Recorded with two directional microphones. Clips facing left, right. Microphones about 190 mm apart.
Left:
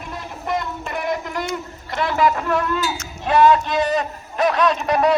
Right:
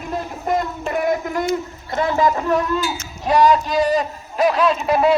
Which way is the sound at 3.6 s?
35° right (ahead or behind).